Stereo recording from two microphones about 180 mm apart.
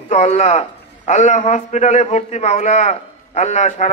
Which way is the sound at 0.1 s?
40° left (ahead or behind).